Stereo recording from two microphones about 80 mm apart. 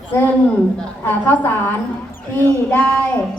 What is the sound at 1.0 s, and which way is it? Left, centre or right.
Speech, left.